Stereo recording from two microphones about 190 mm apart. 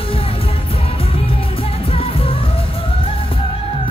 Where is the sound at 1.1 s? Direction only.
30° left (ahead or behind).